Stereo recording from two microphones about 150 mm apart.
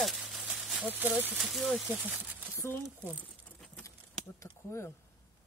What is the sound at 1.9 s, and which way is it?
Speech, 15° right (ahead or behind).